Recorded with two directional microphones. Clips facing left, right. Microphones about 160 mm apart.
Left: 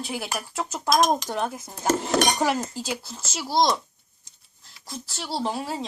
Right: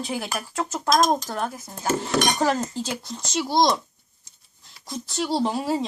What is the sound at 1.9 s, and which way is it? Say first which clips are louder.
Cutlery: left 1 dB; 45° left (ahead or behind).